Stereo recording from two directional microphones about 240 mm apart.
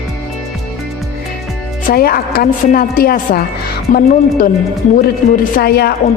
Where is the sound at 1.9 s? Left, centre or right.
Left.